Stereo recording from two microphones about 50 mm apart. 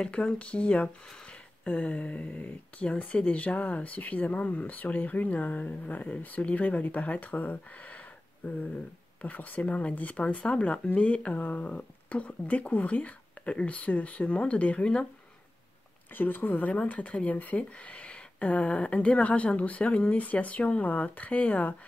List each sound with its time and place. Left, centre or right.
0.1 s speech: left
9.2 s speech: left
11.3 s speech: left
16.2 s speech: left